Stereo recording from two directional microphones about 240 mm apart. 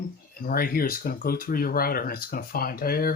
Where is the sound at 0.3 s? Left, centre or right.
Left.